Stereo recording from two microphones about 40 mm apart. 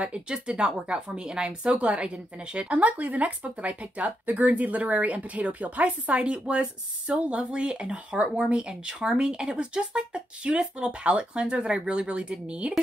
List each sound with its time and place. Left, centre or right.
0.0 s speech: right